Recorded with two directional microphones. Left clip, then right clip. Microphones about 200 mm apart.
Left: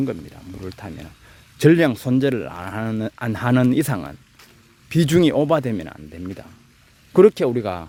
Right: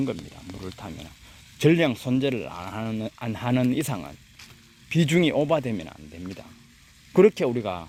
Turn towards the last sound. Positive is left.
turn(degrees=25)  # may be behind; listen again after turning